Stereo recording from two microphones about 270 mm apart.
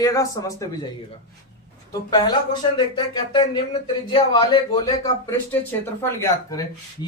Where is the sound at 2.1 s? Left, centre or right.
Centre.